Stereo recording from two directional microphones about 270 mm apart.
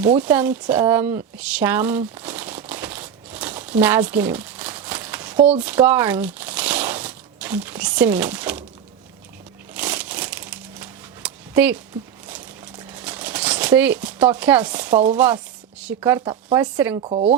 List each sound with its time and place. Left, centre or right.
0.0 s a sound: centre
9.7 s crumpling: centre
12.9 s shuffling cards: centre
15.8 s speech: centre
17.0 s speech: right